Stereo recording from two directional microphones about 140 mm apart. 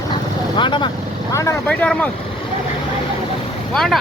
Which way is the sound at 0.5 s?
35° left (ahead or behind).